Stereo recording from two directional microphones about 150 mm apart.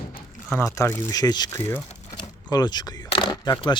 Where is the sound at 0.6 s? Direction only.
20° left (ahead or behind).